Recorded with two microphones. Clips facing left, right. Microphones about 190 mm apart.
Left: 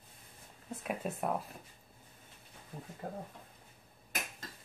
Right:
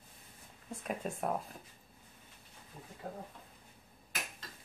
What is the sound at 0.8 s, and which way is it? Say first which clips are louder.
Speech: left 1 dB; 5° left (ahead or behind).